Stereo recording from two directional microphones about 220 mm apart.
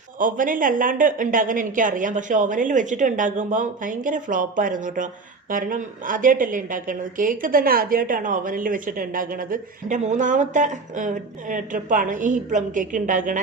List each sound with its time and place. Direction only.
0.2 s a woman's voice: 35° right (ahead or behind)